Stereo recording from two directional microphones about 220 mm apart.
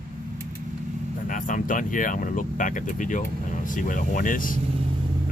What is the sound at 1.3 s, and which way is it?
Speech, 35° left (ahead or behind).